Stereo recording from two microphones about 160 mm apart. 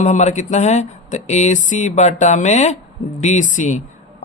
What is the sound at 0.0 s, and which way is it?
A man's voice, 50° left (ahead or behind).